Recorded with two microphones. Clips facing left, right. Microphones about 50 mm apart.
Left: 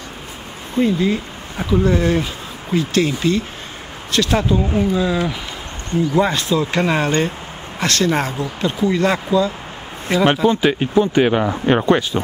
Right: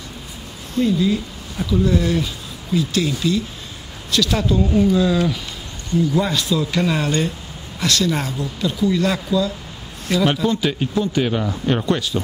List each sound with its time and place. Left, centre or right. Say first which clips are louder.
0.7 s speech: left 1 dB; left
4.4 s speech: even; centre
6.1 s speech: left 3 dB; left